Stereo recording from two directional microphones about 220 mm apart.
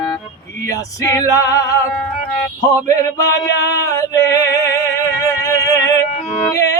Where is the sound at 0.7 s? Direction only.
15° left (ahead or behind).